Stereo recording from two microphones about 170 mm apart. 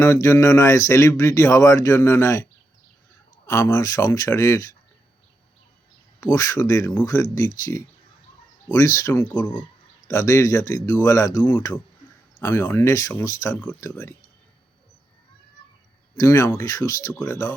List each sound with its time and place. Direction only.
0.0 s speech: 15° left (ahead or behind)
6.1 s speech: 20° left (ahead or behind)
16.1 s speech: 20° left (ahead or behind)